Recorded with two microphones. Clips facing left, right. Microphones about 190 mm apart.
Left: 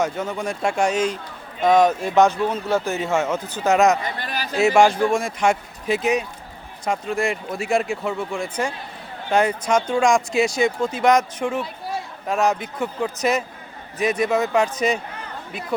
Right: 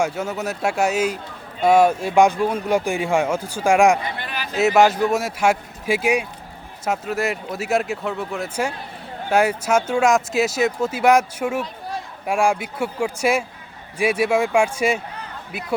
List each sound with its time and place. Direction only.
0.0 s a man's voice: 10° right (ahead or behind)
4.2 s a sound: 40° left (ahead or behind)
4.5 s a man's voice: 5° right (ahead or behind)